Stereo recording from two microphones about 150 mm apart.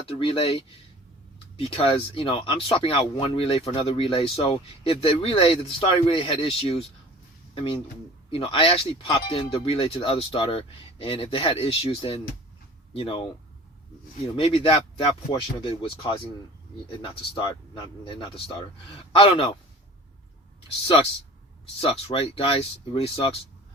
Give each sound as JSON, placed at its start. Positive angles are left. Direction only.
{"t": 0.2, "sound": "speech", "side_deg": 35}
{"t": 14.3, "sound": "speech", "side_deg": 40}
{"t": 21.8, "sound": "speech", "side_deg": 40}